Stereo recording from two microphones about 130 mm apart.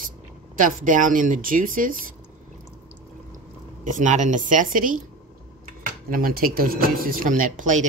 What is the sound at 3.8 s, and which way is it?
Speech, 75° right (ahead or behind).